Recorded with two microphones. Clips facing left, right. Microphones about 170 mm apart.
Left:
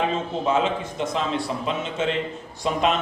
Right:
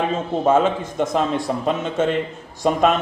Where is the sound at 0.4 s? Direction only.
50° right (ahead or behind).